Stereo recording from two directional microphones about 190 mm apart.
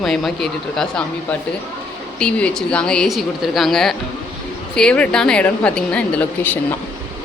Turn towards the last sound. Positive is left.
turn(degrees=5)  # may be behind; listen again after turning